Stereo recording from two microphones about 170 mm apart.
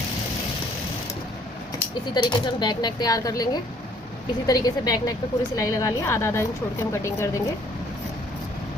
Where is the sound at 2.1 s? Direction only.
25° left (ahead or behind).